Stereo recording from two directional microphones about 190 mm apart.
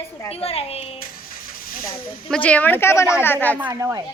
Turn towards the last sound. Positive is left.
turn(degrees=-10)  # may be behind; listen again after turning